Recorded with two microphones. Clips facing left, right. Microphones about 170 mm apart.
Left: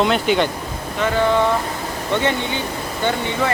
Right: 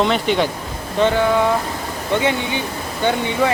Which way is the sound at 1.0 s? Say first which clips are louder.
Right 5 dB; 30° right (ahead or behind).